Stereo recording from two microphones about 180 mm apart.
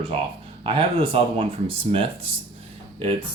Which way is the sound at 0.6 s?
30° right (ahead or behind).